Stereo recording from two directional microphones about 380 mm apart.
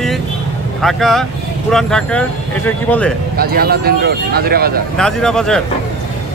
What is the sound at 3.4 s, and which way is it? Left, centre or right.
Speech, right.